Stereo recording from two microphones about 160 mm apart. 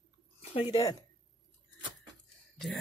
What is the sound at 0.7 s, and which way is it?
Speech, 20° left (ahead or behind).